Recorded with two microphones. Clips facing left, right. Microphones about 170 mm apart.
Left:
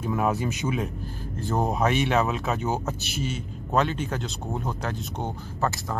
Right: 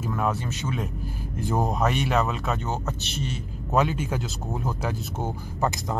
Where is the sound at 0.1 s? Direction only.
10° left (ahead or behind).